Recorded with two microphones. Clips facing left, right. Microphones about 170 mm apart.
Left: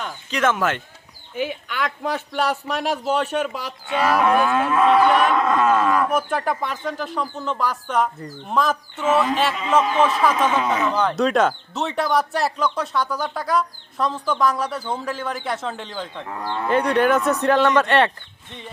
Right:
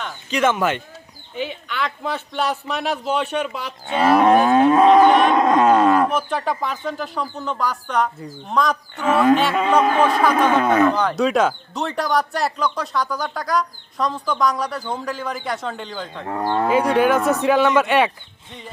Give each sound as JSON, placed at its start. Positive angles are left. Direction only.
{"t": 0.0, "sound": "a man's voice", "side_deg": 0}
{"t": 1.4, "sound": "a man's voice", "side_deg": 10}
{"t": 3.8, "sound": "livestock", "side_deg": -40}
{"t": 6.1, "sound": "a man's voice", "side_deg": 5}
{"t": 9.8, "sound": "speech", "side_deg": -55}
{"t": 10.9, "sound": "a man's voice", "side_deg": 0}
{"t": 16.2, "sound": "speech", "side_deg": -50}
{"t": 16.6, "sound": "a man's voice", "side_deg": -5}